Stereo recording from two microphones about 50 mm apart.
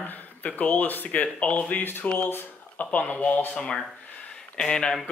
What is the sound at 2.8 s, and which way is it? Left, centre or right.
Speech, left.